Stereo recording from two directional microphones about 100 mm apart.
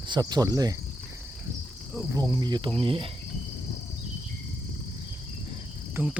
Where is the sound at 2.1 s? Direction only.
45° right (ahead or behind).